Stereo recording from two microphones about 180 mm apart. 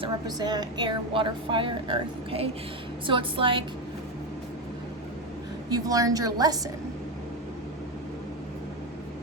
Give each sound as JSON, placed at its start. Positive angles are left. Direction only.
{"t": 0.0, "sound": "a woman's voice", "side_deg": -20}
{"t": 5.7, "sound": "a woman's voice", "side_deg": -20}